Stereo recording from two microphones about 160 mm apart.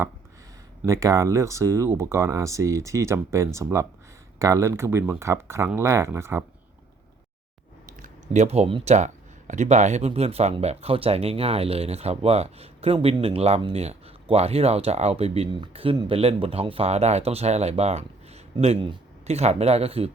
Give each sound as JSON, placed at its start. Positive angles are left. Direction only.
{"t": 0.8, "sound": "speech", "side_deg": -20}
{"t": 8.0, "sound": "speech", "side_deg": -45}